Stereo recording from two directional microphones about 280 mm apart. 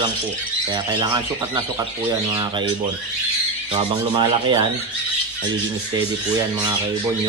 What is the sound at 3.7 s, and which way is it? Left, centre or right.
Speech, centre.